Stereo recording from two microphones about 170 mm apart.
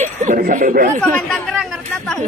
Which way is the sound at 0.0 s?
50° right (ahead or behind).